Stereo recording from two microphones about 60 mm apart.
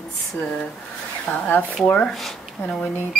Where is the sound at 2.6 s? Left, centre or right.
Left.